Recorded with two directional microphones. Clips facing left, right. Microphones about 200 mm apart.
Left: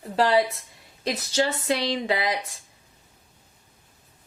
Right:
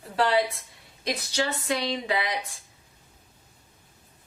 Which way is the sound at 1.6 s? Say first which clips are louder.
Left 3 dB; 30° left (ahead or behind).